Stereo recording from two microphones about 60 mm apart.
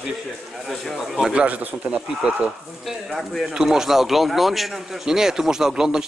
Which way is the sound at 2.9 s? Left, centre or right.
Centre.